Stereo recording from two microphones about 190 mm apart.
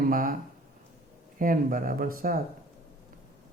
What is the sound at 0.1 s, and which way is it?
Speech, 45° right (ahead or behind).